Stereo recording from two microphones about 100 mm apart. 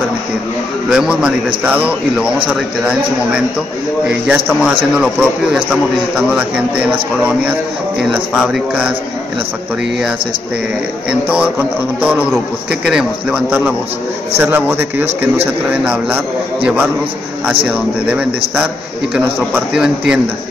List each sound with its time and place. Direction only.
0.8 s a man's voice: 5° right (ahead or behind)
4.3 s a man's voice: 10° right (ahead or behind)
11.1 s a man's voice: 10° right (ahead or behind)